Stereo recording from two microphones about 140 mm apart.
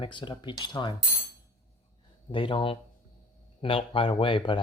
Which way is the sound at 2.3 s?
40° left (ahead or behind).